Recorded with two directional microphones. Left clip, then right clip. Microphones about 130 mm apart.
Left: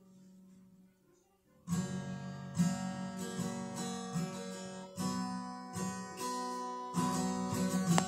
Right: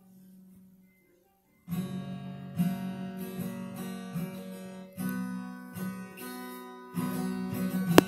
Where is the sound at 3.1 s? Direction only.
75° left (ahead or behind).